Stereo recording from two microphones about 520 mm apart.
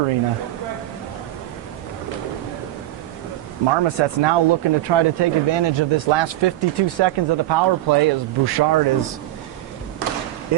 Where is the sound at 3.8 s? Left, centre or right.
Right.